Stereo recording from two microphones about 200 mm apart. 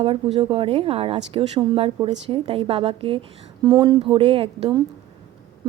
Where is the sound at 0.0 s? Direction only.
30° right (ahead or behind).